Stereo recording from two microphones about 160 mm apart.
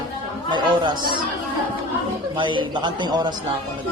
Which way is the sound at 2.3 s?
30° right (ahead or behind).